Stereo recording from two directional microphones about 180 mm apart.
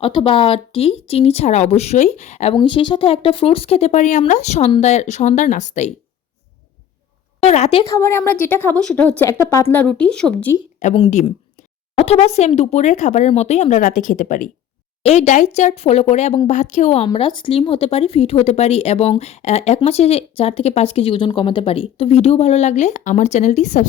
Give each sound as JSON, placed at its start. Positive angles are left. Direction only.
{"t": 0.0, "sound": "speech", "side_deg": 30}
{"t": 7.4, "sound": "speech", "side_deg": 35}
{"t": 7.9, "sound": "a woman's voice", "side_deg": 15}
{"t": 10.8, "sound": "speech", "side_deg": 40}